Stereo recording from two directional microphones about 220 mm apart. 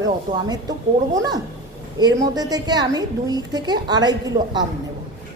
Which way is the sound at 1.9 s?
15° right (ahead or behind).